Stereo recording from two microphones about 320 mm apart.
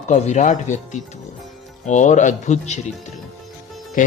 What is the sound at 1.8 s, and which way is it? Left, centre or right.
Speech, left.